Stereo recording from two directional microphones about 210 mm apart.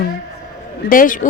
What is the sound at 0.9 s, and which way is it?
Speech, 40° left (ahead or behind).